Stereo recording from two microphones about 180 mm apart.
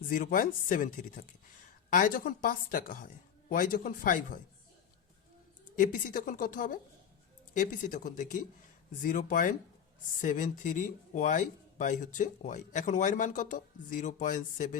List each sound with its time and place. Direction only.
0.1 s speech: 50° left (ahead or behind)
5.8 s speech: 50° left (ahead or behind)